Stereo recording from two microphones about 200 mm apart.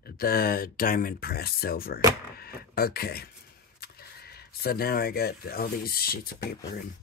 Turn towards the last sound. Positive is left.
turn(degrees=50)  # may be behind; listen again after turning